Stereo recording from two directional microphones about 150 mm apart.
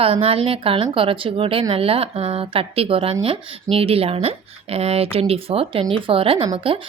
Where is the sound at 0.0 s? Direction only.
40° right (ahead or behind).